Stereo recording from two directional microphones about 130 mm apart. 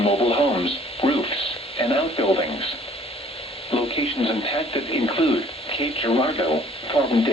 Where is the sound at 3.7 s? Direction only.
45° left (ahead or behind).